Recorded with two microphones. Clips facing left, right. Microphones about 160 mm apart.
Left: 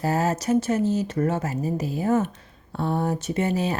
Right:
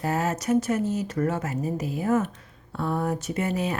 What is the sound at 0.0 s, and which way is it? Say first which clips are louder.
Speech: left 3 dB; 35° left (ahead or behind).